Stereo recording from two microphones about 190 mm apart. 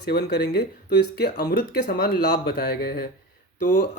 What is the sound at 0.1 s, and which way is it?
Speech, 55° left (ahead or behind).